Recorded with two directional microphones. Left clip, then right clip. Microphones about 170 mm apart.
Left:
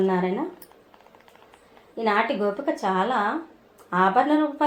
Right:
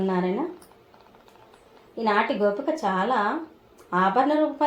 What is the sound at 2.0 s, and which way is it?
Speech, 40° left (ahead or behind).